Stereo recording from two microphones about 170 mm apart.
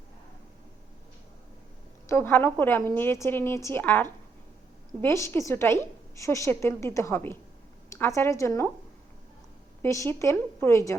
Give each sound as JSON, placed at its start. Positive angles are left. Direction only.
{"t": 2.0, "sound": "a woman's voice", "side_deg": 15}
{"t": 9.8, "sound": "a woman's voice", "side_deg": 15}